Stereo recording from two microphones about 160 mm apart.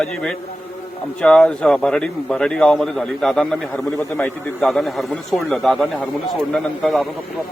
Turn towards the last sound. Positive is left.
turn(degrees=0)  # may be behind; listen again after turning